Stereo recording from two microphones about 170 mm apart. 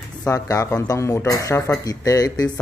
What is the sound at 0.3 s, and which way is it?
Speech, 20° left (ahead or behind).